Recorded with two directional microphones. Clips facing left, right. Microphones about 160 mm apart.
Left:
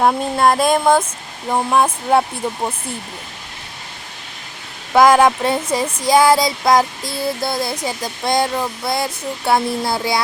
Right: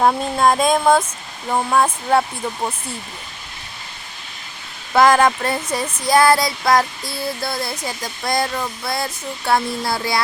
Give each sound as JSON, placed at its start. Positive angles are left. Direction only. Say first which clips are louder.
{"t": 0.0, "sound": "speech", "louder": "left 1 dB", "side_deg": 5}
{"t": 4.9, "sound": "speech", "louder": "left 2 dB", "side_deg": 10}
{"t": 9.5, "sound": "a sound", "louder": "left 2 dB", "side_deg": 20}